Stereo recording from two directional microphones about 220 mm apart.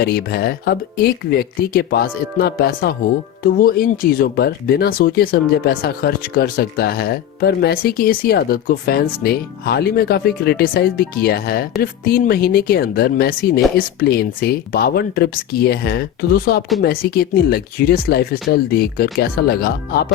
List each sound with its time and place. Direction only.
0.0 s speech: 45° left (ahead or behind)